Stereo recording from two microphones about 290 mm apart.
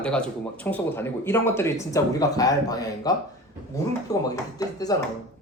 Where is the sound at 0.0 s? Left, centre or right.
Centre.